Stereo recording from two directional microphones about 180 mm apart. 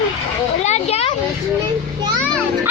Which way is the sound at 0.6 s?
35° left (ahead or behind).